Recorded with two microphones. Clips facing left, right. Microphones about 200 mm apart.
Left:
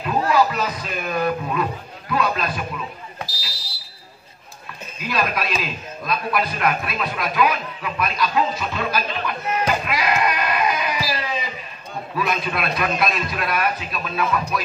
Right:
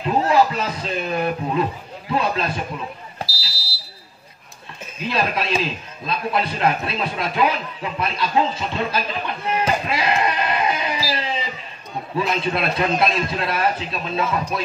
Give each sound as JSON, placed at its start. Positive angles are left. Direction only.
{"t": 0.0, "sound": "speech", "side_deg": -25}
{"t": 4.9, "sound": "a man's voice", "side_deg": -25}